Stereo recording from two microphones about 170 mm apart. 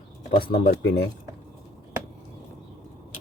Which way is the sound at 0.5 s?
60° left (ahead or behind).